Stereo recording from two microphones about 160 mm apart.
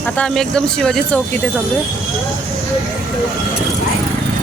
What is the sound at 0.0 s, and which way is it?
Speech, 5° left (ahead or behind).